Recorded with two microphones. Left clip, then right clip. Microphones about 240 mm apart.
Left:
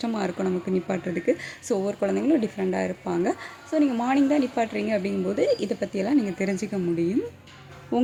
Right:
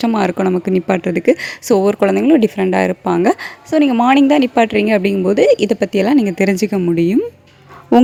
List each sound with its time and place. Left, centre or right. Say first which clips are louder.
0.0 s speech: right 12 dB; right